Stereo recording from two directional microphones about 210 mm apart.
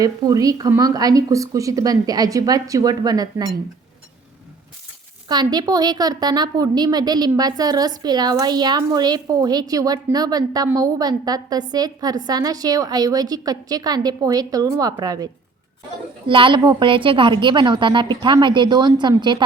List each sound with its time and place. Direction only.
0.0 s a woman's voice: 15° right (ahead or behind)
5.3 s a woman's voice: 20° right (ahead or behind)